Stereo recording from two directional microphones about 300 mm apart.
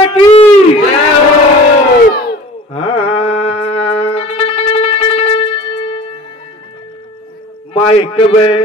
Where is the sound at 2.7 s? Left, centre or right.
Centre.